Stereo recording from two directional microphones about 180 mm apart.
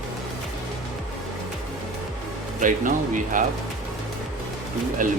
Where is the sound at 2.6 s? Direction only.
45° right (ahead or behind).